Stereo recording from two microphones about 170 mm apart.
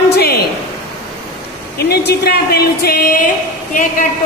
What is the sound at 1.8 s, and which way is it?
Speech, 70° left (ahead or behind).